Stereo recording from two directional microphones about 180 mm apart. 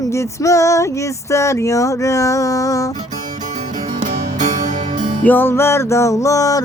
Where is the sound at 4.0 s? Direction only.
40° right (ahead or behind).